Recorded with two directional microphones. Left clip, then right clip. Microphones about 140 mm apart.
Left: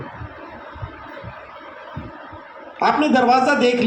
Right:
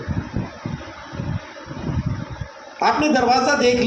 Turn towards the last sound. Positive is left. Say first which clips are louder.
# left 1 dB
turn(degrees=45)  # may be behind; listen again after turning